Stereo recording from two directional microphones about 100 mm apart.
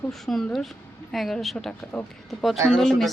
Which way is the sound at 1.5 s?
15° left (ahead or behind).